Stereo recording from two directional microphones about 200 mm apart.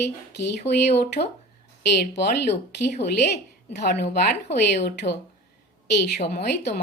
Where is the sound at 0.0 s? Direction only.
60° left (ahead or behind).